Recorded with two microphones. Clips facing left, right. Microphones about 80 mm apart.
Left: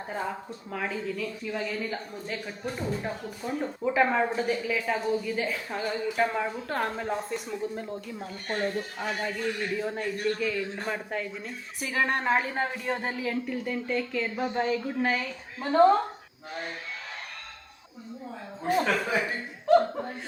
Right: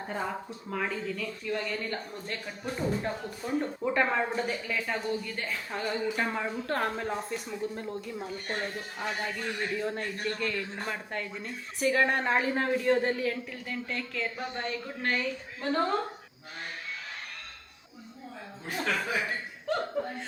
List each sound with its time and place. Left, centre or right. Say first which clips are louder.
0.1 s speech: left 1 dB; centre
18.6 s speech: left 6 dB; left
19.6 s chuckle: left 9 dB; centre